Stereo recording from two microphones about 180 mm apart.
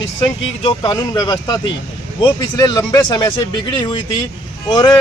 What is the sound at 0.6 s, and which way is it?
Speech, 25° left (ahead or behind).